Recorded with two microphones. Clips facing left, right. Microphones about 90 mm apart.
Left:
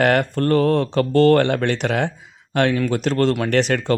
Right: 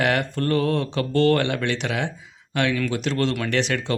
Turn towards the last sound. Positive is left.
turn(degrees=45)  # may be behind; listen again after turning